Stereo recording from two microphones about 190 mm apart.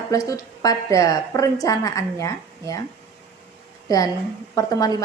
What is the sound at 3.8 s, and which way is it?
A woman's voice, 20° left (ahead or behind).